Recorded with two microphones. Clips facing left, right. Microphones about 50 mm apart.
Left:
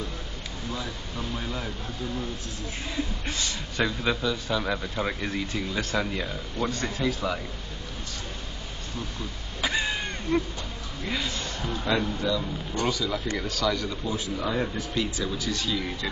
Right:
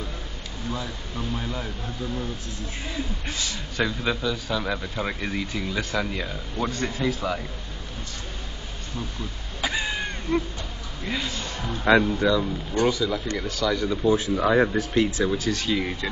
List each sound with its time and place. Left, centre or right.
0.7 s a man's voice: centre
3.3 s a man's voice: centre
9.6 s a sound: centre
11.1 s a man's voice: centre
11.8 s speech: right
12.8 s a man's voice: centre
14.0 s speech: right
14.4 s speech: right
15.0 s speech: right
15.7 s speech: right